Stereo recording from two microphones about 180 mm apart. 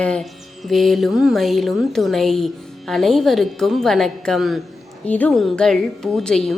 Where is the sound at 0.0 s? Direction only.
5° left (ahead or behind).